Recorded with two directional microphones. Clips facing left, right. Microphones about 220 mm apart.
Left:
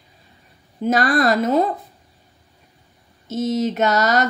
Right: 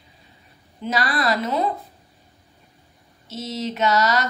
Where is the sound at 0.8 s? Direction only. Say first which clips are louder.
Left 6 dB; 45° left (ahead or behind).